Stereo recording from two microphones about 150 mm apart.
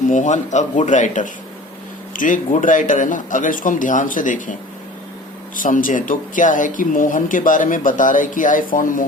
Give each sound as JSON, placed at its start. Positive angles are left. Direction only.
{"t": 0.1, "sound": "speech", "side_deg": 55}
{"t": 5.5, "sound": "speech", "side_deg": 60}